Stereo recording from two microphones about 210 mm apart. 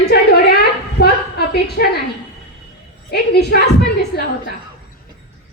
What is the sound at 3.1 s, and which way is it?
A woman's voice, 50° left (ahead or behind).